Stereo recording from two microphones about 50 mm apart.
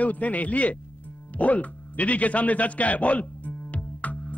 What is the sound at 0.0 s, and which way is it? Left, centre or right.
A man's voice, left.